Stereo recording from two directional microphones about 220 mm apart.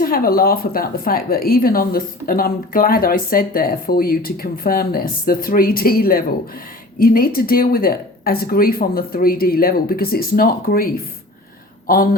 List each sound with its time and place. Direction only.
0.0 s a woman's voice: 40° left (ahead or behind)